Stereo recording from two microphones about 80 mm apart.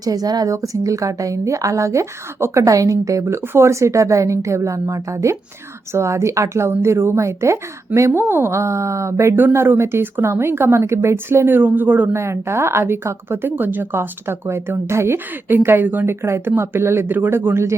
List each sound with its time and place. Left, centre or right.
0.0 s a woman's voice: right
12.1 s a woman's voice: right